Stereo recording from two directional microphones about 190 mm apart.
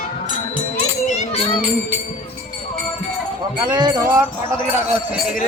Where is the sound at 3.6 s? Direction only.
25° right (ahead or behind).